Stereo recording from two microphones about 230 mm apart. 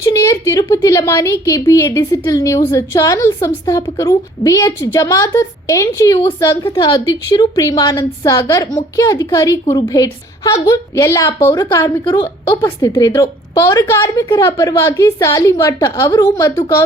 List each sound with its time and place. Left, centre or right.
0.0 s a woman's voice: centre